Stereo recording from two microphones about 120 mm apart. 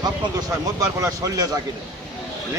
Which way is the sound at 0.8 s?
30° right (ahead or behind).